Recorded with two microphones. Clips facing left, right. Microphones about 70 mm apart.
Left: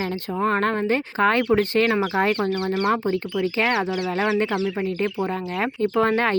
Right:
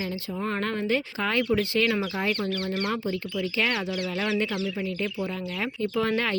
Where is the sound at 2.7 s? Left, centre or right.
Left.